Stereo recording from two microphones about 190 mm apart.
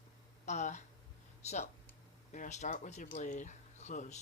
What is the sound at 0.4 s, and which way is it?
Speech, 40° left (ahead or behind).